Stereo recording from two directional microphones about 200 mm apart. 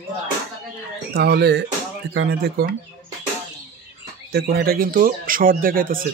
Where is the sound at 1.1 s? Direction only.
55° right (ahead or behind).